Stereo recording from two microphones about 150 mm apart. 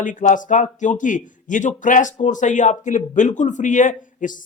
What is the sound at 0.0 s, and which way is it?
A man's voice, 60° left (ahead or behind).